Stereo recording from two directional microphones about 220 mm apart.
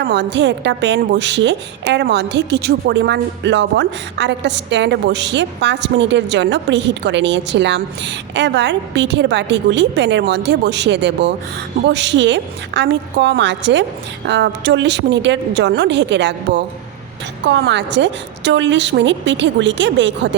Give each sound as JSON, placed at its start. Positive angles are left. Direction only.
{"t": 0.0, "sound": "a woman's voice", "side_deg": -50}